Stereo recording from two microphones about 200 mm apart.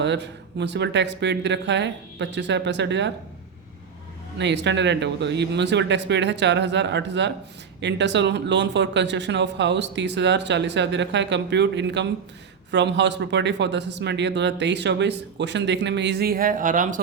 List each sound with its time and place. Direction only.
0.0 s speech: 60° right (ahead or behind)
4.4 s speech: 60° right (ahead or behind); by 17.0 s 40° right (ahead or behind)